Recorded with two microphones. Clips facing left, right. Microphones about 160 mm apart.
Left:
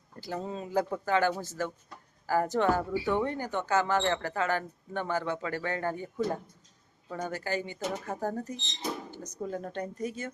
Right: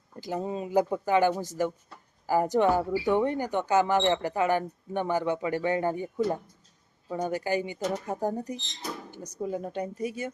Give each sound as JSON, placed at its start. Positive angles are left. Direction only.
{"t": 0.2, "sound": "speech", "side_deg": -15}
{"t": 7.8, "sound": "speech", "side_deg": 5}
{"t": 8.0, "sound": "speech", "side_deg": -15}
{"t": 8.8, "sound": "a sound", "side_deg": 20}
{"t": 9.1, "sound": "speech", "side_deg": -10}